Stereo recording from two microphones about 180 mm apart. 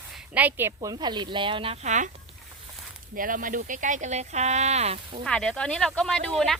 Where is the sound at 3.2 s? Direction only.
50° right (ahead or behind).